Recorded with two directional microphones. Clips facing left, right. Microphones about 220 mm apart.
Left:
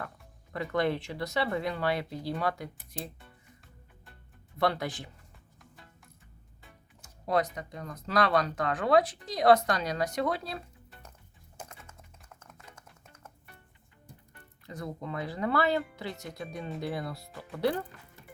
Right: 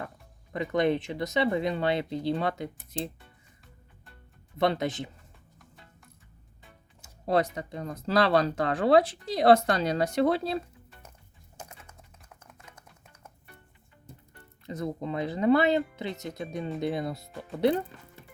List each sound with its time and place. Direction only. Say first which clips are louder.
0.5 s speech: right 4 dB; 20° right (ahead or behind)
4.5 s speech: right 3 dB; 20° right (ahead or behind)
7.3 s speech: right 3 dB; 30° right (ahead or behind)
14.7 s speech: right 5 dB; 20° right (ahead or behind)